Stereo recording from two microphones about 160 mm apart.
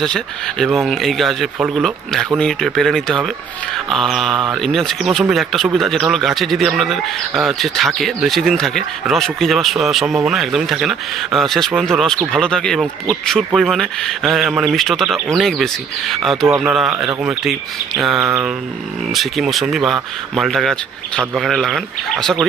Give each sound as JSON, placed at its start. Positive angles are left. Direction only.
{"t": 0.0, "sound": "speech", "side_deg": 5}